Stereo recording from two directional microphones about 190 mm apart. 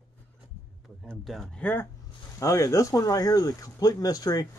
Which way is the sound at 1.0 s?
Centre (ahead or behind).